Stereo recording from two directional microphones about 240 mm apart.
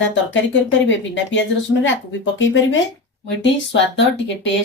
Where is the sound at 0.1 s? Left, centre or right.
Left.